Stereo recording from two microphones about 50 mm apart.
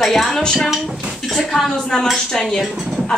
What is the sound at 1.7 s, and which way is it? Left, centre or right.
Speech, centre.